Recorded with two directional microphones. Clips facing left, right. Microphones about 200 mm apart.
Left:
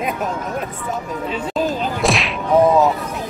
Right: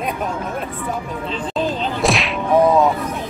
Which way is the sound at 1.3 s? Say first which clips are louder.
Left 1 dB; 10° left (ahead or behind).